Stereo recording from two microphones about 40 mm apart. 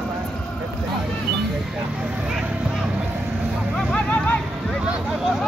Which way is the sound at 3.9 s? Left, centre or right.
Left.